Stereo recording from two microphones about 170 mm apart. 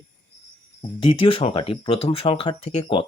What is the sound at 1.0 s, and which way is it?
Speech, 30° left (ahead or behind).